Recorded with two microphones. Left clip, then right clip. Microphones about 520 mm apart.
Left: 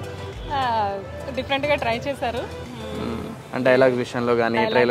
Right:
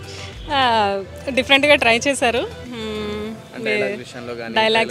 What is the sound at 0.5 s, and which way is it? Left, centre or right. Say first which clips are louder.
A woman's voice: right 6 dB; right.